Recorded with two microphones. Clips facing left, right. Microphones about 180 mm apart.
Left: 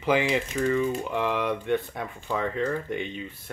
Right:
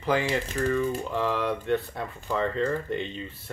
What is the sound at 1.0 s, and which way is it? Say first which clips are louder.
Speech: even; 15° left (ahead or behind).